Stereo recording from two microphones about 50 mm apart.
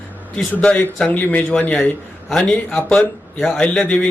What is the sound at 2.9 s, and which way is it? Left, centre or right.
Speech, centre.